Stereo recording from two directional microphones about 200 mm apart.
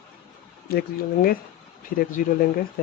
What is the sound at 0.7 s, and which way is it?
A man's voice, 50° left (ahead or behind).